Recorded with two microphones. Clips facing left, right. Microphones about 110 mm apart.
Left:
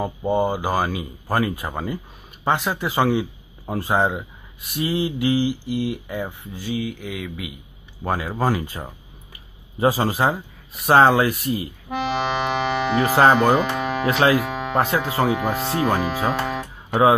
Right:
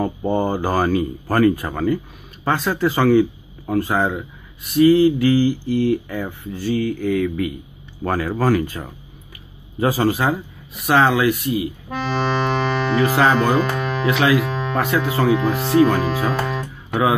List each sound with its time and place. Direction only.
0.0 s speech: 15° left (ahead or behind); by 11.6 s 35° left (ahead or behind)
11.9 s accordion: 15° left (ahead or behind)
13.0 s speech: 35° left (ahead or behind)
13.4 s speech: 15° left (ahead or behind)
14.0 s speech: 35° left (ahead or behind)
14.5 s music: 15° left (ahead or behind)
14.8 s speech: 30° left (ahead or behind)
15.5 s speech: 30° left (ahead or behind)